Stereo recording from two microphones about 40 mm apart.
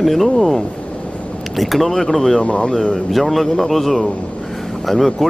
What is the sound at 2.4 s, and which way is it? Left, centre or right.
Speech, left.